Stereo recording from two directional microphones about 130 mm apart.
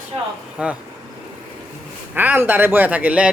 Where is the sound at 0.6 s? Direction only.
10° right (ahead or behind).